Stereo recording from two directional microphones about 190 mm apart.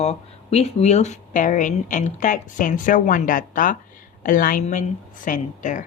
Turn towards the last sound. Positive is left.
turn(degrees=40)  # may be behind; listen again after turning